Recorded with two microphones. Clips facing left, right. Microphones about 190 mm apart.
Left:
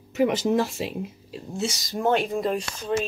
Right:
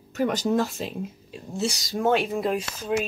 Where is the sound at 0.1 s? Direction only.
10° left (ahead or behind).